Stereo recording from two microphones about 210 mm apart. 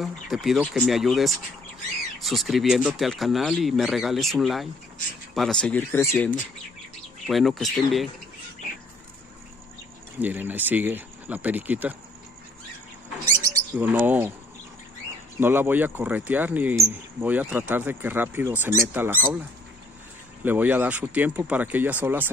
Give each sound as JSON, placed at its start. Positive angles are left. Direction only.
{"t": 0.0, "sound": "speech", "side_deg": 0}
{"t": 10.1, "sound": "speech", "side_deg": -10}
{"t": 13.5, "sound": "speech", "side_deg": -10}
{"t": 15.4, "sound": "speech", "side_deg": -10}
{"t": 20.4, "sound": "speech", "side_deg": -10}